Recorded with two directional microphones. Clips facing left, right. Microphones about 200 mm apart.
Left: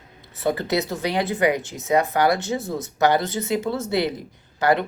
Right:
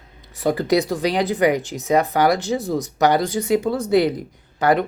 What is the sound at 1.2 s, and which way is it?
Speech, 20° right (ahead or behind).